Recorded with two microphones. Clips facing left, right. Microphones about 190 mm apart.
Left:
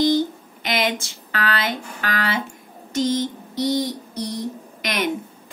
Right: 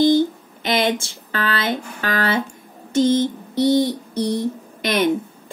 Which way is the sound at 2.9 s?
30° right (ahead or behind).